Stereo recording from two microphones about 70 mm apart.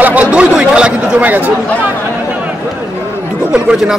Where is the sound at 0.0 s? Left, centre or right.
Centre.